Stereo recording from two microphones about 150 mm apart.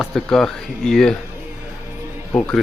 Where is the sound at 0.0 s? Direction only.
5° left (ahead or behind).